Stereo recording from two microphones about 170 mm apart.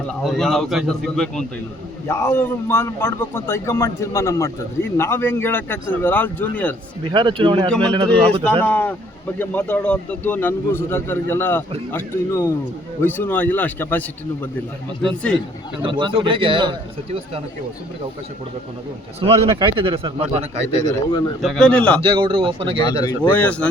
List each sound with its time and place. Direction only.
0.1 s a man's voice: centre (ahead or behind)
2.0 s a man's voice: 15° left (ahead or behind)
7.0 s speech: 30° right (ahead or behind)
8.6 s a man's voice: 10° left (ahead or behind)
15.0 s a man's voice: 5° left (ahead or behind)
15.8 s speech: 30° right (ahead or behind)
19.2 s speech: 30° right (ahead or behind)
21.1 s speech: 25° left (ahead or behind)
21.4 s a man's voice: 5° left (ahead or behind)
22.0 s speech: 30° right (ahead or behind)
22.9 s speech: 25° left (ahead or behind)
23.3 s a man's voice: 10° left (ahead or behind)